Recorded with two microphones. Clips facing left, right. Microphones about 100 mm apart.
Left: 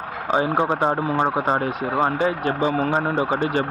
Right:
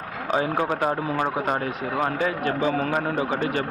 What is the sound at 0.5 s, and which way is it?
Speech, 25° left (ahead or behind).